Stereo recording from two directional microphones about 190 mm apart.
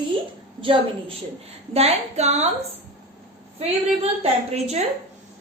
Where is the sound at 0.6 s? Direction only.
25° right (ahead or behind).